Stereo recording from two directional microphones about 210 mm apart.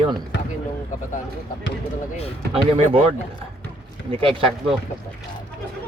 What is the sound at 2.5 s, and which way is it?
Speech, 30° right (ahead or behind).